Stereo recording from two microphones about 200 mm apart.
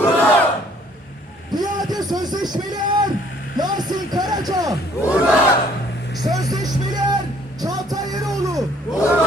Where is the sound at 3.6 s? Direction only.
20° right (ahead or behind).